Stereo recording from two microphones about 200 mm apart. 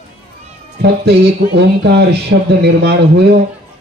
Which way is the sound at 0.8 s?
55° right (ahead or behind).